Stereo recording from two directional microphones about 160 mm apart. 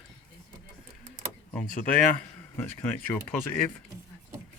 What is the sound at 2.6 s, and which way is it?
Speech, 15° left (ahead or behind).